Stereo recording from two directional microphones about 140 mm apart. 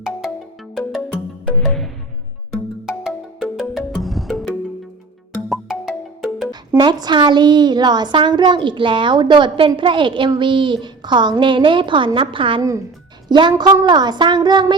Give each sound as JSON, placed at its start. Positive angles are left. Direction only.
{"t": 1.1, "sound": "music", "side_deg": 5}
{"t": 5.5, "sound": "music", "side_deg": -5}
{"t": 6.7, "sound": "a woman's voice", "side_deg": -30}